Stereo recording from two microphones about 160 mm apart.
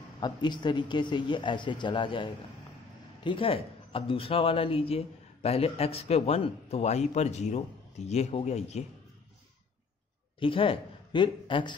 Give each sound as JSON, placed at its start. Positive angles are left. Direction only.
{"t": 0.2, "sound": "speech", "side_deg": 25}
{"t": 10.4, "sound": "speech", "side_deg": 35}